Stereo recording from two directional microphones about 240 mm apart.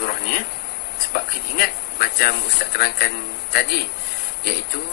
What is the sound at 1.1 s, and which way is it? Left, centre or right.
Speech, left.